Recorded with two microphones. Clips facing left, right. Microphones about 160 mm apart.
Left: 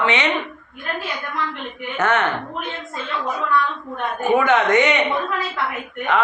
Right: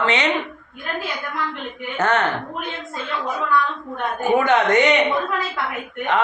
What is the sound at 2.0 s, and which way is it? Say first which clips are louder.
Speech: even; 35° right (ahead or behind).